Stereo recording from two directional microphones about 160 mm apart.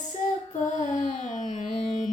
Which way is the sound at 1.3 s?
50° left (ahead or behind).